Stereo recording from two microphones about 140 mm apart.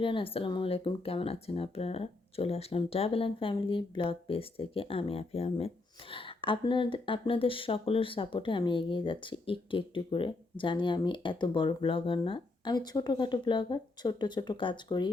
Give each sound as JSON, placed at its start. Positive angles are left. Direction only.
{"t": 0.0, "sound": "speech", "side_deg": 40}